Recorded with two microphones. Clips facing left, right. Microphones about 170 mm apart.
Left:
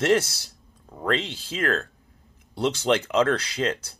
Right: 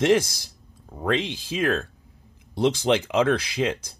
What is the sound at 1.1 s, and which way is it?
Speech, 15° right (ahead or behind).